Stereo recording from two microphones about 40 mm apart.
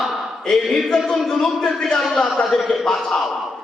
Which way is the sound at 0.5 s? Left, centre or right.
Centre.